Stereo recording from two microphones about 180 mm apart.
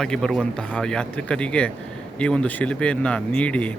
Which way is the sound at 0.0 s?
5° left (ahead or behind).